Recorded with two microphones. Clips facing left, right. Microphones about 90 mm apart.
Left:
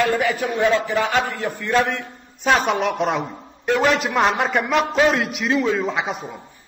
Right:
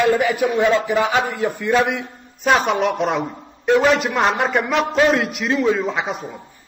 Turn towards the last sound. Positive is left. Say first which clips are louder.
# right 1 dB
turn(degrees=0)  # may be behind; listen again after turning